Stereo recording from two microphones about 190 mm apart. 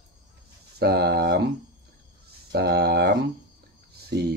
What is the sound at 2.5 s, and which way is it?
Mantra, 55° right (ahead or behind).